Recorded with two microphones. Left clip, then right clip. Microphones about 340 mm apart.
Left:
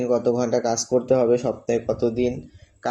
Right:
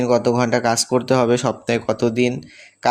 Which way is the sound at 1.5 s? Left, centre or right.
Right.